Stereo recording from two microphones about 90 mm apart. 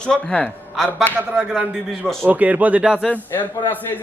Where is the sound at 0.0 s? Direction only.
10° left (ahead or behind).